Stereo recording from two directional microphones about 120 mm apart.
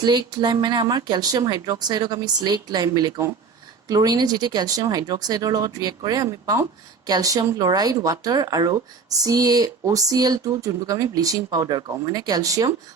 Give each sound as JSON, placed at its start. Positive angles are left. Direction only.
{"t": 0.0, "sound": "speech", "side_deg": -35}